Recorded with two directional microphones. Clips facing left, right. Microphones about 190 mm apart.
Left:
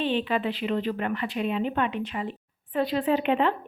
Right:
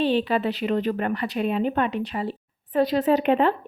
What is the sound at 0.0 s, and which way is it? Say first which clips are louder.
Speech: right 4 dB; 40° right (ahead or behind).